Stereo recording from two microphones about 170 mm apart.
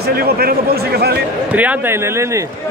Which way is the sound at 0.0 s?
65° right (ahead or behind).